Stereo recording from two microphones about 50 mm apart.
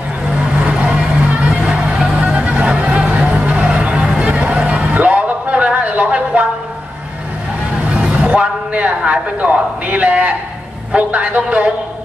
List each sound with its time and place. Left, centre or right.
0.6 s vehicle: right
2.2 s music: right
8.3 s a sound: right
10.9 s music: right